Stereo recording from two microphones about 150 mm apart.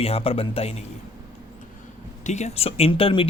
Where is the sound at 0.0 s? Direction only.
40° left (ahead or behind).